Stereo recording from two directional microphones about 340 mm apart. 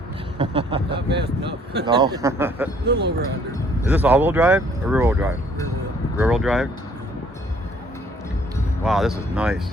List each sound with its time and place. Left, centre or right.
0.3 s a man's voice: centre
2.8 s speech: right
3.8 s speech: centre
8.8 s speech: centre